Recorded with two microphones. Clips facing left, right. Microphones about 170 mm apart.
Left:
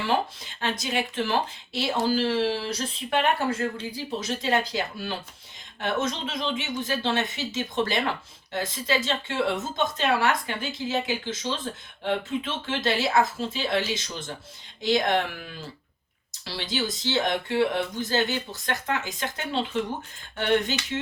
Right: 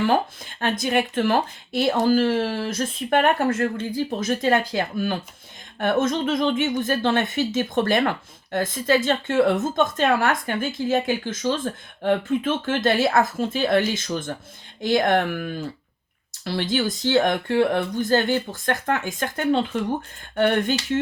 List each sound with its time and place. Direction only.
0.0 s speech: 50° right (ahead or behind)